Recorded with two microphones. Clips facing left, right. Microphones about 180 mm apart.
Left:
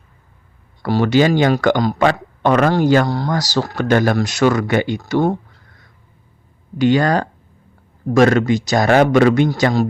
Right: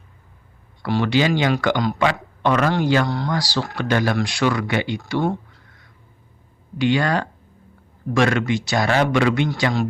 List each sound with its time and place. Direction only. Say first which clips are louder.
0.8 s speech: left 5 dB; 40° left (ahead or behind)
6.7 s speech: left 5 dB; 40° left (ahead or behind)